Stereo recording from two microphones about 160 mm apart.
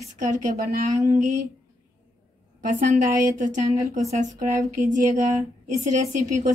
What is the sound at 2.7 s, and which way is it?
Speech, 55° right (ahead or behind).